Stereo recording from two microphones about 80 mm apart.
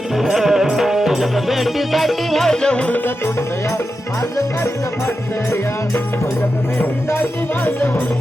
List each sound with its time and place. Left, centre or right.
0.2 s music: centre
5.0 s music: left
7.1 s music: left